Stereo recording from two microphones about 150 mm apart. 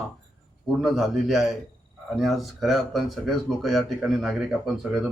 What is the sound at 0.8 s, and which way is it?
Speech, centre (ahead or behind).